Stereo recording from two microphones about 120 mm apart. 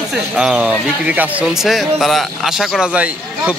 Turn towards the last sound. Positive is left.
turn(degrees=-10)  # may be behind; listen again after turning